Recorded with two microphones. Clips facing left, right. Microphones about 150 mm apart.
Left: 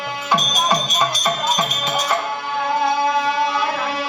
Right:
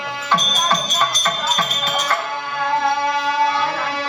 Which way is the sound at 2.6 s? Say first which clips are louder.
Even; centre (ahead or behind).